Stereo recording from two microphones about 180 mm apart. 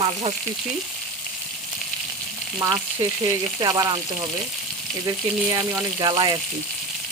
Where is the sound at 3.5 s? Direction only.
20° right (ahead or behind).